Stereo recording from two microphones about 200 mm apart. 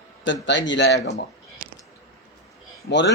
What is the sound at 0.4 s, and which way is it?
Speech, 65° left (ahead or behind).